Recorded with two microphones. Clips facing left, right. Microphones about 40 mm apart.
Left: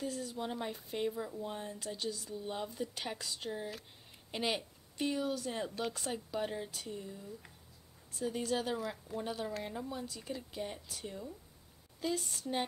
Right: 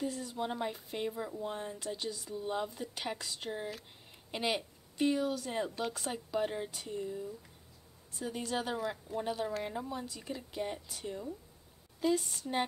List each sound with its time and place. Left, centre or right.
0.0 s a woman's voice: centre
6.5 s a woman's voice: centre
8.1 s a woman's voice: centre